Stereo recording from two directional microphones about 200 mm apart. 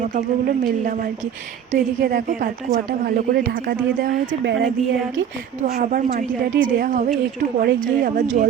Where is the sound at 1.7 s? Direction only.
40° right (ahead or behind); by 4.7 s 60° right (ahead or behind).